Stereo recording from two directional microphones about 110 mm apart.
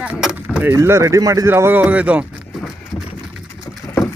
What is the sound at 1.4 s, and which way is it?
Speech, 20° right (ahead or behind).